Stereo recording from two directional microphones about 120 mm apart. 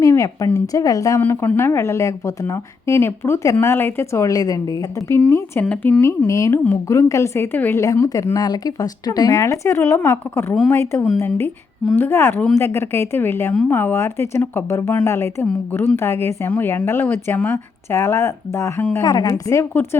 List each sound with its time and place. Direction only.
0.0 s a sound: 25° left (ahead or behind)
0.5 s speech: 30° left (ahead or behind)
1.2 s speech: 15° left (ahead or behind)
5.3 s speech: 10° left (ahead or behind)
19.0 s speech: 30° left (ahead or behind)